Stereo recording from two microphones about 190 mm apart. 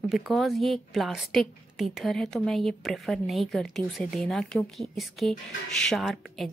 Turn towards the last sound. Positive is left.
turn(degrees=0)  # may be behind; listen again after turning